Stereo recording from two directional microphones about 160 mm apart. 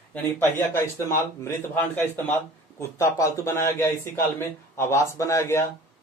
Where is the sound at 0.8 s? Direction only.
15° left (ahead or behind).